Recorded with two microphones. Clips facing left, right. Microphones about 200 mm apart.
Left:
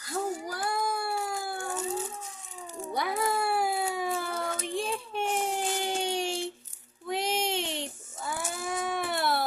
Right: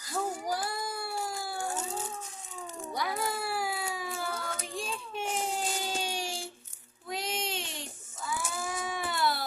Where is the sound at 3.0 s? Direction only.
55° left (ahead or behind).